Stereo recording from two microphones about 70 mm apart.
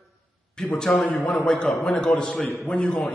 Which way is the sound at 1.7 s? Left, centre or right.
Centre.